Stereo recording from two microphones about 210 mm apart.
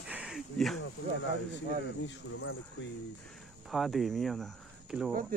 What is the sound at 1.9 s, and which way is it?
Speech, 55° left (ahead or behind).